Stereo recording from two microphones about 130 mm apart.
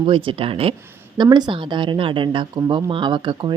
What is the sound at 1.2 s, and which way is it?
Speech, 35° right (ahead or behind).